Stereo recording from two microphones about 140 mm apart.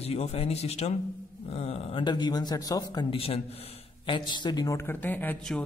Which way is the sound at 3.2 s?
45° left (ahead or behind).